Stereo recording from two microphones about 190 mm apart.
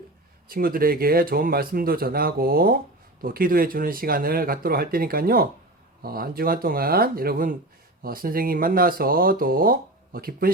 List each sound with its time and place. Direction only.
0.4 s speech: 50° right (ahead or behind)